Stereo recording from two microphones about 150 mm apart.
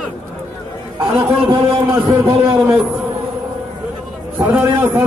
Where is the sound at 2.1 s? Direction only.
35° right (ahead or behind).